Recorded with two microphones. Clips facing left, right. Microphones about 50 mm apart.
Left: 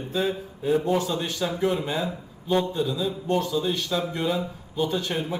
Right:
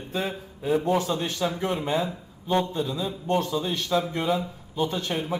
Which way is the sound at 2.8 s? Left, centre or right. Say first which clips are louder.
Left 2 dB; right.